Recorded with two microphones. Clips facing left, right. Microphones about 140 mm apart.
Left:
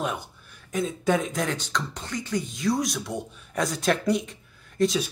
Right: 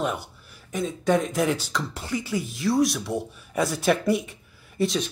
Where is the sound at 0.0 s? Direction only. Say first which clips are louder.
Right 2 dB; 5° right (ahead or behind).